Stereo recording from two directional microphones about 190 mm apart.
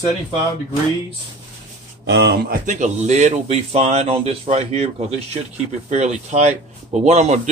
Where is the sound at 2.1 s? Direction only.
65° right (ahead or behind).